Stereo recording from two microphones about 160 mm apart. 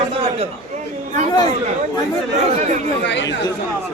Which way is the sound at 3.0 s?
90° left.